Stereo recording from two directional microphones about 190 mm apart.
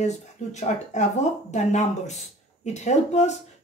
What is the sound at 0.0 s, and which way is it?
Speech, 35° left (ahead or behind).